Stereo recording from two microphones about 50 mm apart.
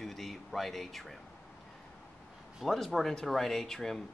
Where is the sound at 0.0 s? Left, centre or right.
Centre.